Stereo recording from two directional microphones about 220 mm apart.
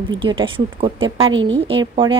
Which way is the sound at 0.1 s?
20° right (ahead or behind).